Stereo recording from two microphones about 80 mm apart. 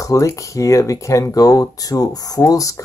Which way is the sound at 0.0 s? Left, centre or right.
Left.